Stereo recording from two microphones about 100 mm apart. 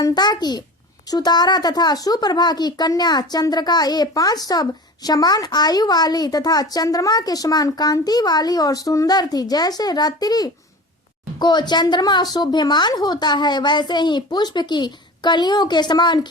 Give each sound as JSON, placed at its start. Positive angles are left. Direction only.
{"t": 0.0, "sound": "a woman's voice", "side_deg": 45}